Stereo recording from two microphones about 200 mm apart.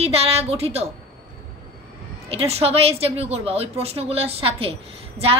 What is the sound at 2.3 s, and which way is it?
A woman's voice, 30° right (ahead or behind).